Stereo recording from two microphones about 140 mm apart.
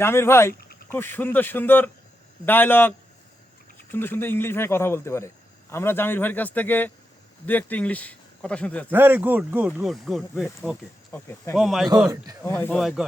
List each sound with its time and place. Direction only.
0.0 s a man's voice: 20° left (ahead or behind)
3.9 s a man's voice: 15° left (ahead or behind)
8.9 s speech: 15° right (ahead or behind)
9.8 s speech: centre (ahead or behind)
11.1 s a man's voice: 15° left (ahead or behind)
11.5 s speech: centre (ahead or behind)
12.0 s speech: 25° right (ahead or behind)
12.4 s a man's voice: 15° left (ahead or behind)
12.7 s speech: 5° right (ahead or behind)